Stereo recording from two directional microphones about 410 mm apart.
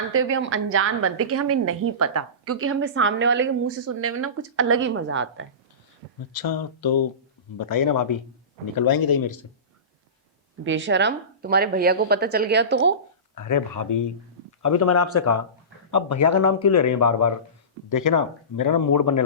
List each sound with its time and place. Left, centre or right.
0.1 s a woman's voice: right
6.3 s speech: left
10.6 s a woman's voice: right
13.3 s speech: left
14.6 s speech: left